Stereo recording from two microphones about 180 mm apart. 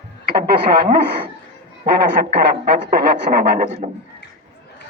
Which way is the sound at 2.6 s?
65° right (ahead or behind).